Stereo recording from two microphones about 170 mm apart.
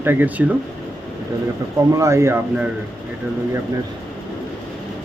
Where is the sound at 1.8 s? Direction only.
20° right (ahead or behind).